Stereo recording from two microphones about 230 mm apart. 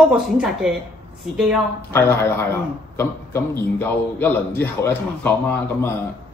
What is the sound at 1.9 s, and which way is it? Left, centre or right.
A man's voice, centre.